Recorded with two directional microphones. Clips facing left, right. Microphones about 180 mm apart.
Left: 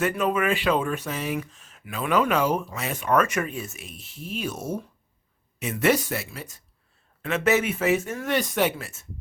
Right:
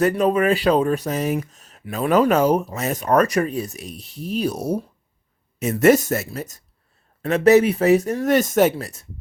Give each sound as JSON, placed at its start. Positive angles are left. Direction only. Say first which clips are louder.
{"t": 0.0, "sound": "speech", "louder": "right 6 dB", "side_deg": -35}